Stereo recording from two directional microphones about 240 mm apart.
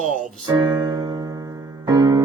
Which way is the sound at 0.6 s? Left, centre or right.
Centre.